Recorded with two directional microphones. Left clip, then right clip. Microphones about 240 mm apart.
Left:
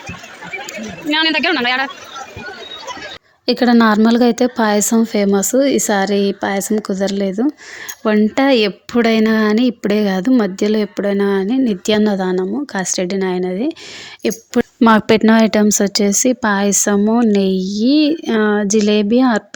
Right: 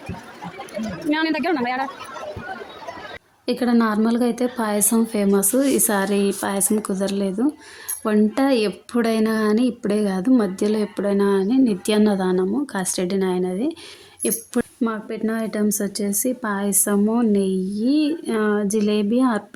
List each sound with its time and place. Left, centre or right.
1.1 s a man's voice: centre
3.4 s speech: right